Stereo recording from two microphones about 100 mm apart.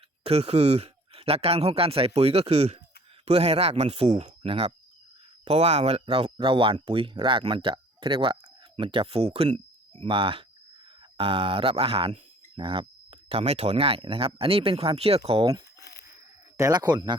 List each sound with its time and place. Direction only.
0.3 s speech: 90° right
5.5 s speech: 90° right
10.0 s speech: 65° right (ahead or behind); by 15.4 s 85° right
16.6 s speech: 40° right (ahead or behind)